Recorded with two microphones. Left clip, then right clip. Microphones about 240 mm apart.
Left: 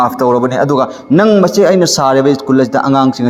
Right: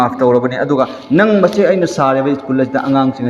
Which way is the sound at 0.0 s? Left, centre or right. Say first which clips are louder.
Left 1 dB; left.